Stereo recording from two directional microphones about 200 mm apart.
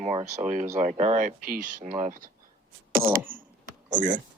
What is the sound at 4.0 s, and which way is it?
Speech, 40° right (ahead or behind).